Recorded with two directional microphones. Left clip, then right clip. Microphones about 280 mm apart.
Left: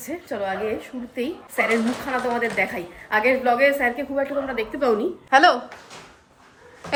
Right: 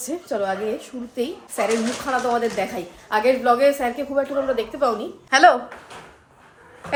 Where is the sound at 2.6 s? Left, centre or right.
Centre.